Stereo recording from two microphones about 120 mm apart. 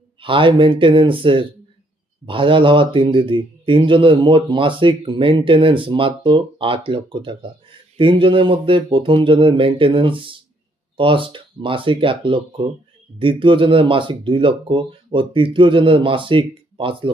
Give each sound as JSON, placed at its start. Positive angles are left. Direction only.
{"t": 0.2, "sound": "speech", "side_deg": -45}